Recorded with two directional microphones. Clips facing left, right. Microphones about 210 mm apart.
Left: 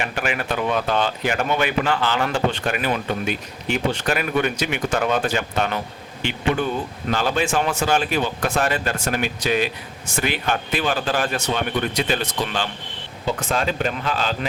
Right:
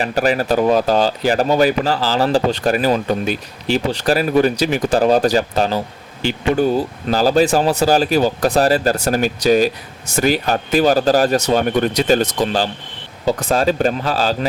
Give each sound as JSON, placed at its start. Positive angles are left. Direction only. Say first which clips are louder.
{"t": 0.0, "sound": "speech", "louder": "right 8 dB", "side_deg": -35}